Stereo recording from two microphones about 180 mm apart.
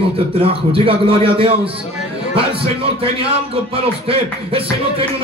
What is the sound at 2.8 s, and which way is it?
A man's voice, 30° right (ahead or behind).